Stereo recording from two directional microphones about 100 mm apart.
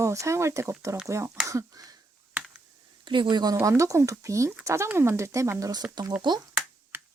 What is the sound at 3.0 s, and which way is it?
Speech, 50° right (ahead or behind).